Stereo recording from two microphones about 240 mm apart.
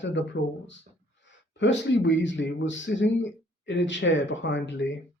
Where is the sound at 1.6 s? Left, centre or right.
Left.